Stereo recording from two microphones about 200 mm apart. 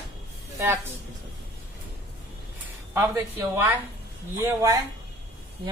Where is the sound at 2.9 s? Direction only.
15° right (ahead or behind).